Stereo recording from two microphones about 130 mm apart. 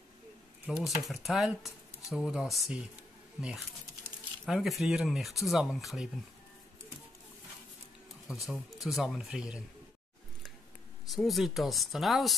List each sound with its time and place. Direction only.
0.7 s speech: centre (ahead or behind)
8.3 s speech: centre (ahead or behind)
11.1 s speech: centre (ahead or behind)